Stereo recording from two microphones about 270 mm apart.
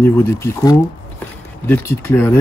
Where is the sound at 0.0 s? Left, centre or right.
Centre.